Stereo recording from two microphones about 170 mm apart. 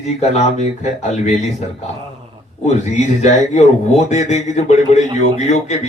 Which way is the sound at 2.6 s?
40° left (ahead or behind).